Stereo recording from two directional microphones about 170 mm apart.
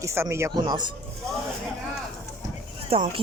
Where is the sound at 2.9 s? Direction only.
35° right (ahead or behind).